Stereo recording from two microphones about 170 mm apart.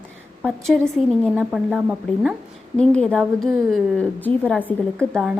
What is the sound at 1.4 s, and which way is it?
Speech, 5° right (ahead or behind).